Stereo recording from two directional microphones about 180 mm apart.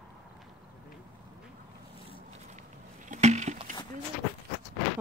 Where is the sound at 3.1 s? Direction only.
40° right (ahead or behind).